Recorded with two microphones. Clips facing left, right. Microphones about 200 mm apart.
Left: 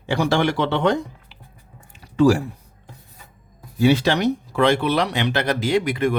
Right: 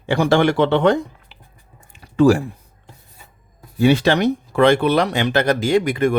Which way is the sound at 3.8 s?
55° right (ahead or behind).